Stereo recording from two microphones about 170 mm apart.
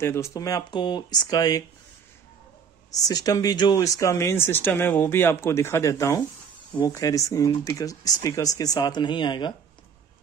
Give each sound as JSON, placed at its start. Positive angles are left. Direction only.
{"t": 0.0, "sound": "speech", "side_deg": 15}
{"t": 3.1, "sound": "speech", "side_deg": 20}